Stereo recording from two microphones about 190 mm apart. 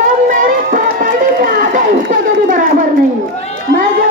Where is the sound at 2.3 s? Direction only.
45° right (ahead or behind).